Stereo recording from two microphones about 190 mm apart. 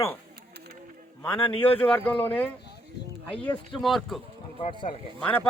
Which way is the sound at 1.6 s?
5° left (ahead or behind).